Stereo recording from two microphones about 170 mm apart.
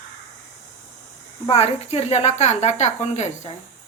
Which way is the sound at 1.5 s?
35° left (ahead or behind).